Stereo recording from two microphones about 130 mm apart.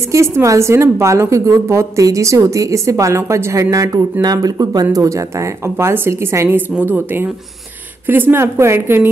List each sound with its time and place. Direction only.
0.1 s a woman's voice: 20° right (ahead or behind)